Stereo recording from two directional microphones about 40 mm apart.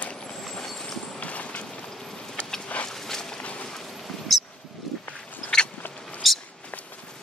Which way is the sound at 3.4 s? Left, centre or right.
Left.